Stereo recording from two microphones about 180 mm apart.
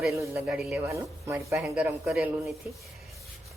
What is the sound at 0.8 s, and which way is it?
Speech, 15° right (ahead or behind).